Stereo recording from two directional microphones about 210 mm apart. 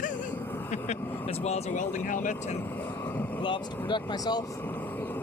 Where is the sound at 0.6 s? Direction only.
30° left (ahead or behind).